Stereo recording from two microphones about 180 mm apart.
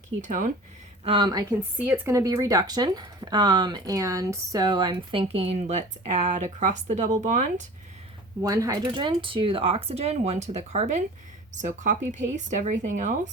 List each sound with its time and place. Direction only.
0.2 s speech: 50° right (ahead or behind)
1.0 s speech: 25° right (ahead or behind)
1.8 s speech: 15° right (ahead or behind); by 7.5 s 45° right (ahead or behind)
8.4 s speech: 20° right (ahead or behind); by 13.3 s 45° right (ahead or behind)